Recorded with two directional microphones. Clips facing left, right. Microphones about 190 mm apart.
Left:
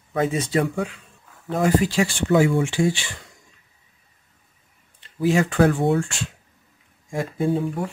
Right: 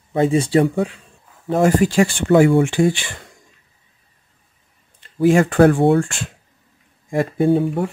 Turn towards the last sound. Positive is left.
turn(degrees=-65)  # may be behind; listen again after turning